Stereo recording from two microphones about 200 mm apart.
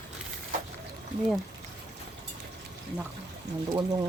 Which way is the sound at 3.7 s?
20° right (ahead or behind).